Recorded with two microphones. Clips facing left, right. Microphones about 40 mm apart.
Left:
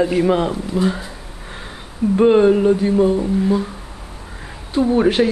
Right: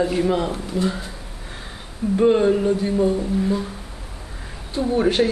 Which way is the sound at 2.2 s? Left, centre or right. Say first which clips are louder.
Left 4 dB; left.